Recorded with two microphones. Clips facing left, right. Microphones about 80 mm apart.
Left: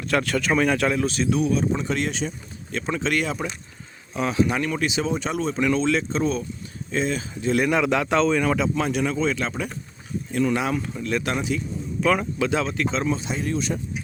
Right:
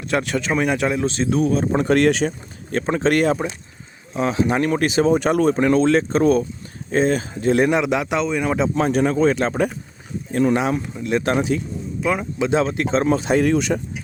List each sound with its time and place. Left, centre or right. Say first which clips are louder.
0.1 s speech: right 1 dB; right
2.7 s speech: right 6 dB; right
4.1 s speech: right 3 dB; right
5.6 s speech: right 6 dB; right
7.7 s speech: right 1 dB; centre
8.4 s speech: right 3 dB; right
11.9 s a man's voice: left 1 dB; centre
12.4 s speech: right 4 dB; right
13.1 s speech: right 9 dB; right